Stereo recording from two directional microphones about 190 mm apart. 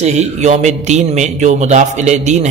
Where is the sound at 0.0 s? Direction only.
35° right (ahead or behind).